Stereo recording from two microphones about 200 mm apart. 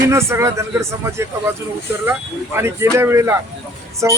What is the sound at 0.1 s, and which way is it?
Speech, 15° right (ahead or behind).